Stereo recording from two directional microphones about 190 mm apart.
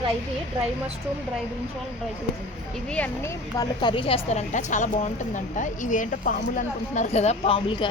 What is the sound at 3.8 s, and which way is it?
A woman's voice, 25° left (ahead or behind).